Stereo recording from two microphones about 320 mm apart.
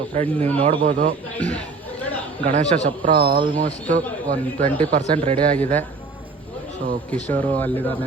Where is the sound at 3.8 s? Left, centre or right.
Centre.